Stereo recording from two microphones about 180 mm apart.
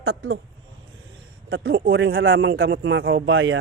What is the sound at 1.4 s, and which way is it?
Speech, 75° right (ahead or behind).